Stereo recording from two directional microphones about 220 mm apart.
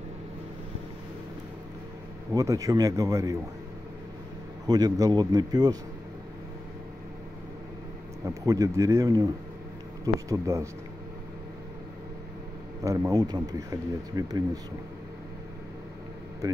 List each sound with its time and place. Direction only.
2.3 s speech: 15° right (ahead or behind)
4.6 s speech: 15° right (ahead or behind)
8.3 s speech: 15° right (ahead or behind)
12.8 s speech: 15° right (ahead or behind)
16.4 s speech: 15° right (ahead or behind)